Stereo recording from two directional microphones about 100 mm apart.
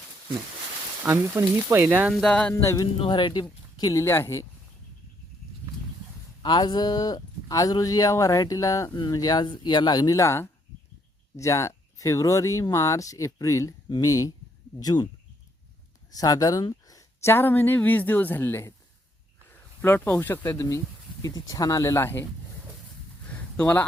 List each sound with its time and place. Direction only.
1.0 s speech: 25° right (ahead or behind)
2.1 s a sound: 10° left (ahead or behind)
3.0 s speech: 55° left (ahead or behind)
3.8 s speech: 40° left (ahead or behind)
4.0 s speech: 25° left (ahead or behind)
6.4 s speech: 50° left (ahead or behind)
16.1 s speech: 35° left (ahead or behind)
16.9 s speech: 25° left (ahead or behind)
19.8 s speech: 20° left (ahead or behind)
23.2 s a sound: 15° left (ahead or behind)